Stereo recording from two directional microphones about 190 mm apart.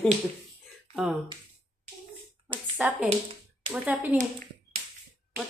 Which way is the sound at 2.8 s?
5° right (ahead or behind).